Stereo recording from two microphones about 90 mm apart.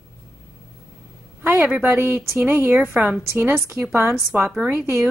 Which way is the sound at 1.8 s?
25° right (ahead or behind).